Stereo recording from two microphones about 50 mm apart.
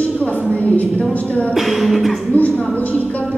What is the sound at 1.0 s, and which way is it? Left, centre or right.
Speech, left.